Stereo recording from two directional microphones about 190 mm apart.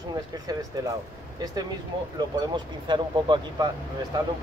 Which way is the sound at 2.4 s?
25° right (ahead or behind).